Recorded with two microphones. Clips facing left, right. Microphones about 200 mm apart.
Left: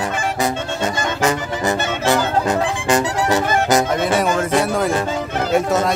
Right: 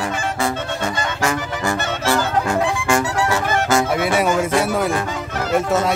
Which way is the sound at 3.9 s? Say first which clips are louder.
Even; 10° right (ahead or behind).